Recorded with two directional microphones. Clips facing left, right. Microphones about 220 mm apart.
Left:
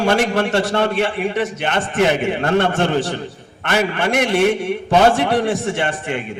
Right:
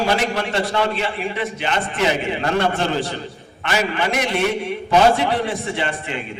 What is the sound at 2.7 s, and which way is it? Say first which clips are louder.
A man's voice: left 4 dB; 65° left (ahead or behind).